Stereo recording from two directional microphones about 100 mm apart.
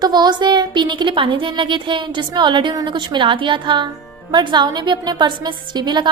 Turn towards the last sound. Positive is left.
turn(degrees=-45)  # may be behind; listen again after turning